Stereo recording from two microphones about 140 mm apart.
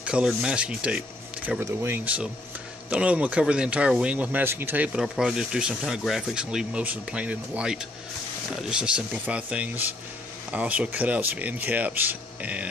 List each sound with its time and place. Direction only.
0.0 s speech: 5° right (ahead or behind)